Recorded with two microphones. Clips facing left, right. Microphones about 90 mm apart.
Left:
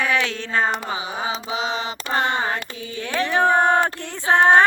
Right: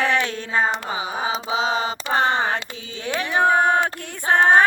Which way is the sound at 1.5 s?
30° right (ahead or behind).